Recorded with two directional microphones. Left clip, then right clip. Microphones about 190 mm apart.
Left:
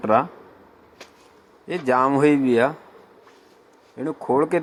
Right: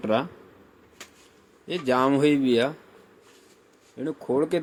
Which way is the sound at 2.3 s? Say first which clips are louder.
Left 3 dB; 25° left (ahead or behind).